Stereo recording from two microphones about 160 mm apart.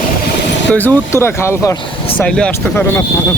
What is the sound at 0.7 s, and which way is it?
Speech, 15° left (ahead or behind).